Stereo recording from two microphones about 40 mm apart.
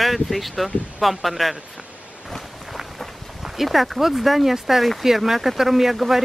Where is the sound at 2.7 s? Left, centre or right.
Centre.